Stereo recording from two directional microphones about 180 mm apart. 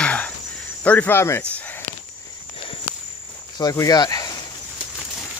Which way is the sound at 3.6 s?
20° left (ahead or behind).